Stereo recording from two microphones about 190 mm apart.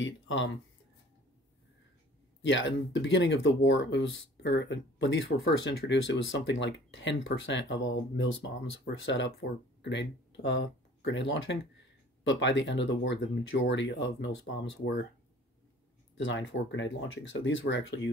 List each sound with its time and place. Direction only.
2.4 s speech: 75° left (ahead or behind)
16.3 s speech: 75° left (ahead or behind)